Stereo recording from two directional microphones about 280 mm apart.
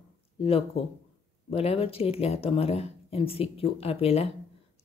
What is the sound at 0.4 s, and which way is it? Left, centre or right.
Speech, left.